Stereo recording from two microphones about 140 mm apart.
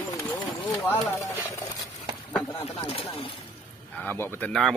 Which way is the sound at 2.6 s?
45° left (ahead or behind).